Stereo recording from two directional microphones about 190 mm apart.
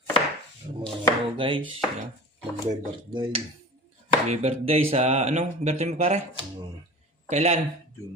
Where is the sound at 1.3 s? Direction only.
25° right (ahead or behind).